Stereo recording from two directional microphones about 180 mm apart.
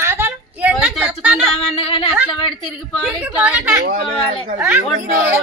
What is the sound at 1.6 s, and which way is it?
Speech, 35° left (ahead or behind).